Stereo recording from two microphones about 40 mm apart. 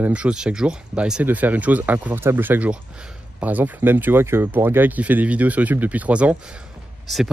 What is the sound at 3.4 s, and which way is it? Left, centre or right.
Speech, right.